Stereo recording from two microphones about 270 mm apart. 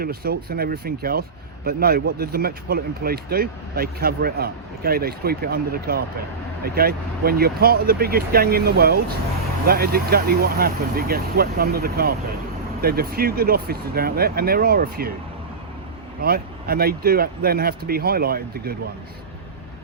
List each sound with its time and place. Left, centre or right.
0.0 s speech: right
16.2 s speech: right